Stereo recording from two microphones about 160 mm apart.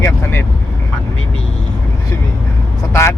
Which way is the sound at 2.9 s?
15° left (ahead or behind).